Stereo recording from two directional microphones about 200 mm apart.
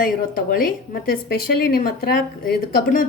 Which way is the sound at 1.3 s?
50° left (ahead or behind).